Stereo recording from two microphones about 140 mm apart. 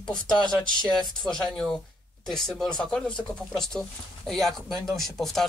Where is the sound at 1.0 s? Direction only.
5° left (ahead or behind).